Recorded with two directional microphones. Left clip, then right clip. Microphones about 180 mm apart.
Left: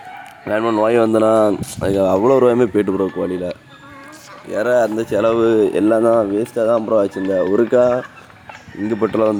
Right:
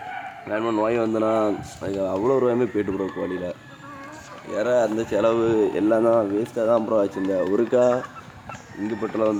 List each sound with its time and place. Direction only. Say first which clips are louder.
0.4 s speech: left 7 dB; 50° left (ahead or behind); by 8.0 s 25° left (ahead or behind)
9.0 s speech: left 7 dB; 50° left (ahead or behind)